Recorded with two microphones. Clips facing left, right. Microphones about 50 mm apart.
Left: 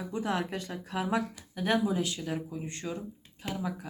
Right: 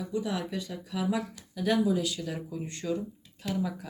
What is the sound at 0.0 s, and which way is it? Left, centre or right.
Speech, left.